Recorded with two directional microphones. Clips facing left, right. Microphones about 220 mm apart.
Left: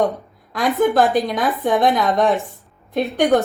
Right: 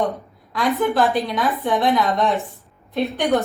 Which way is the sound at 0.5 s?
45° left (ahead or behind).